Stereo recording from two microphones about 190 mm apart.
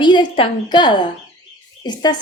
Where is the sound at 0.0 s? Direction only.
25° left (ahead or behind).